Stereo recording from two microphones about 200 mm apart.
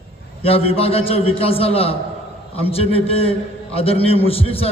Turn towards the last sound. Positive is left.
turn(degrees=30)  # may be behind; listen again after turning